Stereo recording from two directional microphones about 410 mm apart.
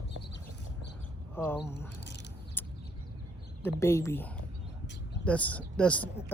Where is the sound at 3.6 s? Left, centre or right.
Centre.